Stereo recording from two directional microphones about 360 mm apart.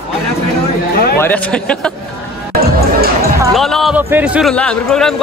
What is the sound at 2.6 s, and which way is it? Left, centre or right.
Music, right.